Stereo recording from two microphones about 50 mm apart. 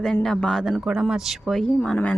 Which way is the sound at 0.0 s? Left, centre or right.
Centre.